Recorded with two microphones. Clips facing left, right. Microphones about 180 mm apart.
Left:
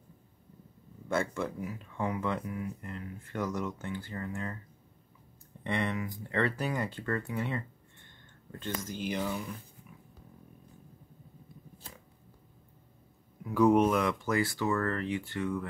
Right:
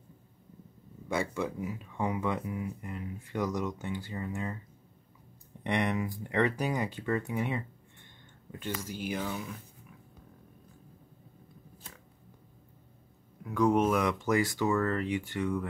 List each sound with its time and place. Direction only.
1.0 s speech: 15° right (ahead or behind)
5.6 s speech: 15° right (ahead or behind)
13.4 s speech: 5° left (ahead or behind)
14.0 s speech: 20° right (ahead or behind)